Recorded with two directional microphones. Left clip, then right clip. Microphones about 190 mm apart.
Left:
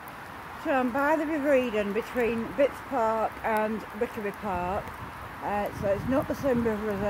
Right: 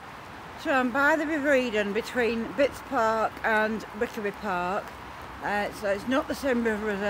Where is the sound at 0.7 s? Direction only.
5° right (ahead or behind).